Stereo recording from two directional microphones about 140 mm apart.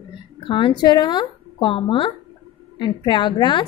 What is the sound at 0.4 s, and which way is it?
A woman's voice, 35° left (ahead or behind).